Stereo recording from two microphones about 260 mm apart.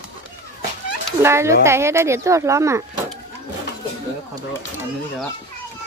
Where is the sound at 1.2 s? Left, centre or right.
Centre.